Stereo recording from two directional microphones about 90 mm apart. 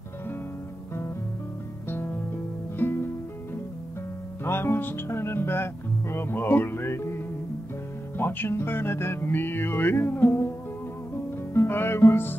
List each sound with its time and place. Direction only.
2.8 s music: 25° left (ahead or behind)
4.5 s speech: 25° left (ahead or behind)
8.2 s speech: 25° left (ahead or behind)
11.5 s speech: 25° left (ahead or behind)